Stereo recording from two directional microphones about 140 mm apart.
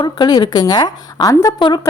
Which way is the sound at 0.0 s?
30° left (ahead or behind).